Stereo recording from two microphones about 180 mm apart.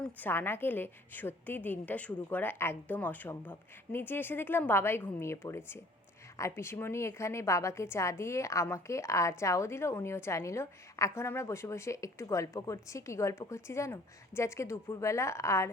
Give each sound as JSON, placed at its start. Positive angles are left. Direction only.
{"t": 0.0, "sound": "a woman's voice", "side_deg": 10}